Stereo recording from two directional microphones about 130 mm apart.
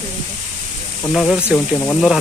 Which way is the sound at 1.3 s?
15° left (ahead or behind).